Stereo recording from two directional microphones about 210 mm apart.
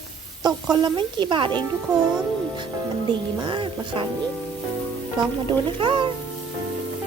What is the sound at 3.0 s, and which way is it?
Speech, 25° right (ahead or behind).